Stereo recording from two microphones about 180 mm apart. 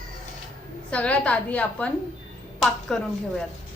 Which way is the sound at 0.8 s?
5° left (ahead or behind).